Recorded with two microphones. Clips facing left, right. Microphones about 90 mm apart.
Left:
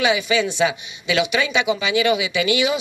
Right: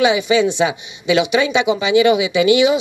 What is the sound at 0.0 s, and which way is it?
Speech, 25° right (ahead or behind).